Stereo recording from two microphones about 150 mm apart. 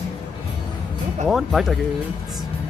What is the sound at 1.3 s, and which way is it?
Speech, centre (ahead or behind).